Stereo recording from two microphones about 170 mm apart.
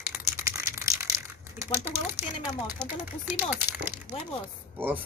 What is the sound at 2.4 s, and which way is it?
Speech, 10° right (ahead or behind).